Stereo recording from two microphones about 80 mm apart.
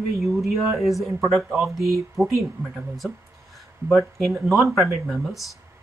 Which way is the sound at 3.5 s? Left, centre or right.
Centre.